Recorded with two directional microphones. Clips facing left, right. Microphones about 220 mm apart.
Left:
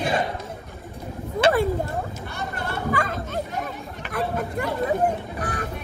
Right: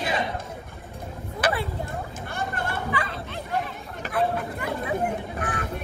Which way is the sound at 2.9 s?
45° left (ahead or behind).